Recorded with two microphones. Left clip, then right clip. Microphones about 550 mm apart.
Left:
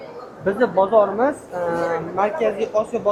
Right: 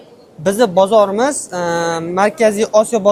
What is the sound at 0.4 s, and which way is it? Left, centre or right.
A woman's voice, right.